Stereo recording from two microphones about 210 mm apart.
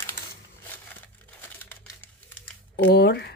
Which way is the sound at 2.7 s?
50° left (ahead or behind).